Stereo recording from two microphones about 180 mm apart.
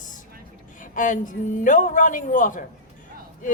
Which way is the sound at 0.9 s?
45° left (ahead or behind).